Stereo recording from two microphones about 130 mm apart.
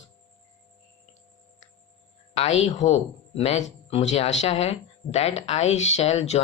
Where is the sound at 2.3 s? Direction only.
55° left (ahead or behind).